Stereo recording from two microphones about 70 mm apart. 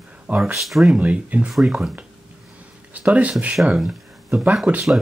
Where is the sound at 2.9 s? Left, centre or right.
Centre.